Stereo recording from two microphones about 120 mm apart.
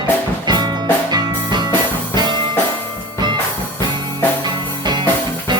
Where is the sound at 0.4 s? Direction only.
35° right (ahead or behind).